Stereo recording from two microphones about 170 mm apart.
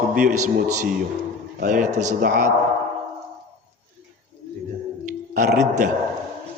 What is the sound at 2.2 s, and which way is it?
Speech, 65° right (ahead or behind).